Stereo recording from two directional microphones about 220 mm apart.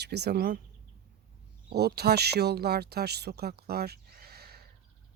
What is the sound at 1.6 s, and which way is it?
Speech, 45° right (ahead or behind).